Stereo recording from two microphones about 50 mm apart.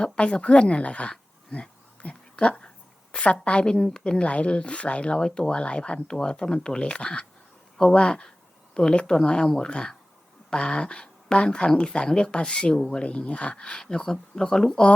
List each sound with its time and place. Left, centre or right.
0.0 s speech: centre
1.1 s a sound: centre
3.4 s speech: left